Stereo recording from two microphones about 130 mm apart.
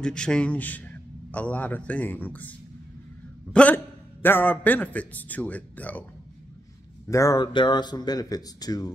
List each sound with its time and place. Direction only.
0.0 s a man's voice: 5° left (ahead or behind)
3.5 s a man's voice: 15° left (ahead or behind)
7.1 s speech: 25° left (ahead or behind)